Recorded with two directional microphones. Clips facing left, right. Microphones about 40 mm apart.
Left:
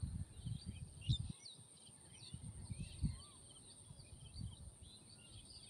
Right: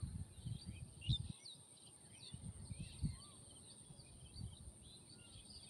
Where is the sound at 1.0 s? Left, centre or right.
Centre.